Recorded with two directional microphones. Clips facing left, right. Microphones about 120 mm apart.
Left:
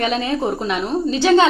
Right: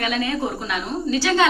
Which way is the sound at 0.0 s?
30° left (ahead or behind).